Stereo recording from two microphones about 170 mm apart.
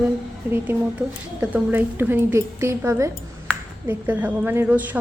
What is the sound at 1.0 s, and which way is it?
A woman's voice, 10° right (ahead or behind).